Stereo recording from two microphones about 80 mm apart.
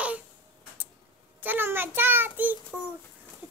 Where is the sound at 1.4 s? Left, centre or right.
Right.